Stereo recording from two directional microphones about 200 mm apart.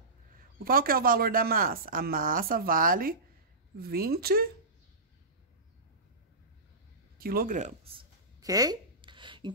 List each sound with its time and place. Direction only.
0.7 s speech: 45° right (ahead or behind)
7.2 s speech: 45° right (ahead or behind)
8.4 s a sound: 20° right (ahead or behind)